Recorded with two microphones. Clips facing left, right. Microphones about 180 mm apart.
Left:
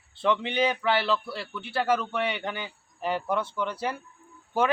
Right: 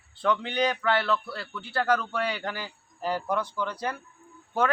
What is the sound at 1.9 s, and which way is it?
Speech, 5° left (ahead or behind).